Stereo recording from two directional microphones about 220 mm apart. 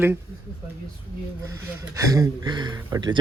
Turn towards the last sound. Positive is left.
turn(degrees=-20)  # may be behind; listen again after turning